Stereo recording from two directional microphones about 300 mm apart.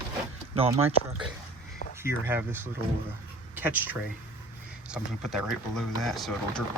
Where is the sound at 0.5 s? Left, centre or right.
Centre.